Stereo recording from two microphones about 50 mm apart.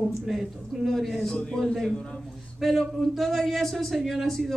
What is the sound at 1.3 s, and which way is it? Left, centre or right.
A man's voice, centre.